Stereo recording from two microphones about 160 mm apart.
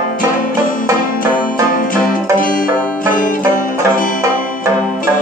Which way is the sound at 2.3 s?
60° left (ahead or behind).